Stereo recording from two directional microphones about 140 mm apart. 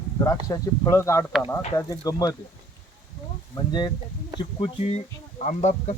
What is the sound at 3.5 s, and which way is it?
Speech, 30° left (ahead or behind).